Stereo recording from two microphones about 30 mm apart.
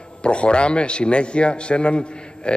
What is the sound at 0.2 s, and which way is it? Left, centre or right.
A man's voice, left.